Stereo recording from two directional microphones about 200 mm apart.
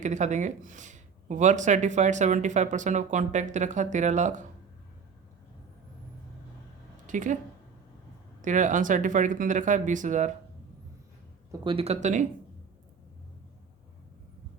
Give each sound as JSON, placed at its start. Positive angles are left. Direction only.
{"t": 0.0, "sound": "speech", "side_deg": -35}
{"t": 7.1, "sound": "speech", "side_deg": -40}
{"t": 8.4, "sound": "speech", "side_deg": -40}
{"t": 11.6, "sound": "speech", "side_deg": -25}